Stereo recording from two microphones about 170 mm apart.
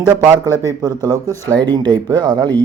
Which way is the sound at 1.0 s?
20° right (ahead or behind).